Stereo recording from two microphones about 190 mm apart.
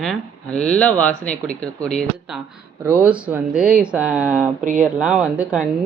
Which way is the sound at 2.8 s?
10° right (ahead or behind).